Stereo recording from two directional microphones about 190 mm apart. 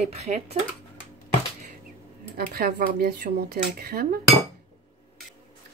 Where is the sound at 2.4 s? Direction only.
50° right (ahead or behind).